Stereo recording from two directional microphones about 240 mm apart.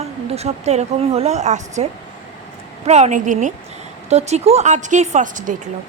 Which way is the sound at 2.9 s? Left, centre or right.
Right.